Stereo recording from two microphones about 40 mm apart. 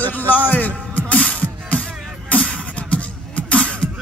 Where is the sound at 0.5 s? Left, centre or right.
Left.